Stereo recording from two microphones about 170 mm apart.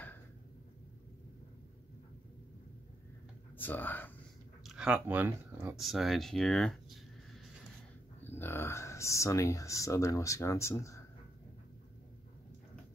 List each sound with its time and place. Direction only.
3.5 s speech: 10° left (ahead or behind)
4.6 s speech: 5° right (ahead or behind)
5.8 s speech: centre (ahead or behind)
8.2 s speech: 10° left (ahead or behind)